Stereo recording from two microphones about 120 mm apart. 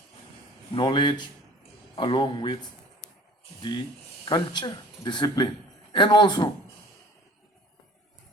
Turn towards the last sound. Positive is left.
turn(degrees=40)  # may be behind; listen again after turning